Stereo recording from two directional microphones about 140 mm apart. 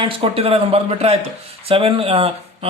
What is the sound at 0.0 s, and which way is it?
Speech, 40° right (ahead or behind).